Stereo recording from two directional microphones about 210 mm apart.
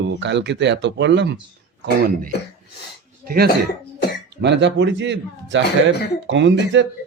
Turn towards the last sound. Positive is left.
turn(degrees=-65)  # may be behind; listen again after turning